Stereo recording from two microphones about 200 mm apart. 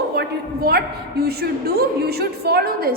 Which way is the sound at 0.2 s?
50° right (ahead or behind).